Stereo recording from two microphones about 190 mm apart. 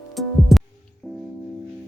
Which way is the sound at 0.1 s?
Centre (ahead or behind).